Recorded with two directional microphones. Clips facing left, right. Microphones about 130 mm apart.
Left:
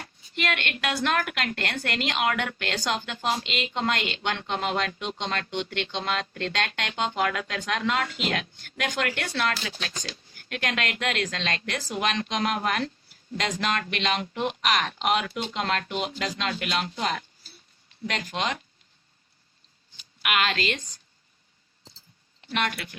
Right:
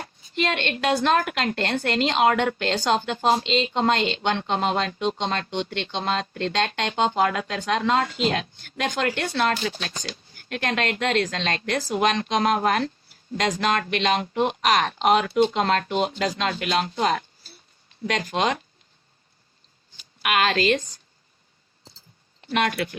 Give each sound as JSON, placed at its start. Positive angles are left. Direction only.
{"t": 0.0, "sound": "a sound", "side_deg": -30}
{"t": 1.0, "sound": "a woman's voice", "side_deg": -30}
{"t": 20.2, "sound": "speech", "side_deg": -40}
{"t": 22.4, "sound": "speech", "side_deg": -40}